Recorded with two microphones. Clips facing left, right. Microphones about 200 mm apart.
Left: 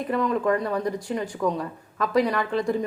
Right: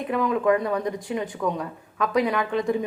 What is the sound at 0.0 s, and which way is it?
Speech, centre (ahead or behind).